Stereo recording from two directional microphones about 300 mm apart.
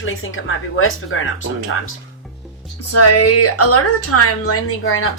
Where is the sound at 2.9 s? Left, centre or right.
Left.